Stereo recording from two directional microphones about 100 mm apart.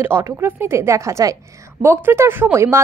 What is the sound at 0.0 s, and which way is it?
A woman's voice, 25° right (ahead or behind).